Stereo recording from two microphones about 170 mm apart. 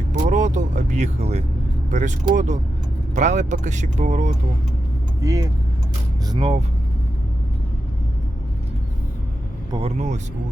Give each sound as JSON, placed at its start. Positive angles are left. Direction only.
{"t": 0.1, "sound": "speech", "side_deg": -45}
{"t": 5.2, "sound": "speech", "side_deg": -20}
{"t": 9.7, "sound": "speech", "side_deg": -40}